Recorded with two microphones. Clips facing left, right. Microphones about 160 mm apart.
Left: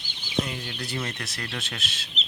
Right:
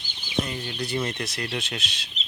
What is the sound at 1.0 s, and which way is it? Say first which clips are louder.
Speech: right 5 dB; 15° right (ahead or behind).